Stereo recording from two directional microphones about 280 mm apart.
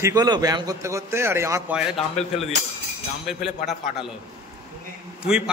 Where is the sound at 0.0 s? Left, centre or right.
Centre.